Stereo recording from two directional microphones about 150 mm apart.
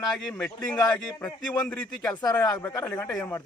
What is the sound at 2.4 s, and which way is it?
Speech, 25° left (ahead or behind).